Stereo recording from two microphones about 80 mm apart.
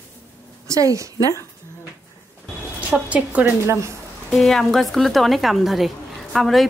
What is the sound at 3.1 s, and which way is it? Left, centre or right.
Speech, centre.